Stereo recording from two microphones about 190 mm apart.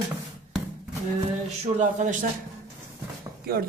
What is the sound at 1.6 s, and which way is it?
Speech, 40° right (ahead or behind).